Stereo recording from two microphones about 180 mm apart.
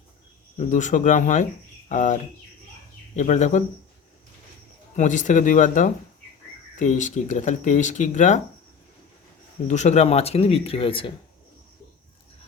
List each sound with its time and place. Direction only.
0.5 s speech: 45° left (ahead or behind)
3.2 s speech: 45° left (ahead or behind)
4.9 s speech: 45° left (ahead or behind)
9.6 s speech: 40° left (ahead or behind)